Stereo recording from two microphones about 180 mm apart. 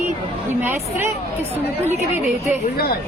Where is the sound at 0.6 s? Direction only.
15° right (ahead or behind).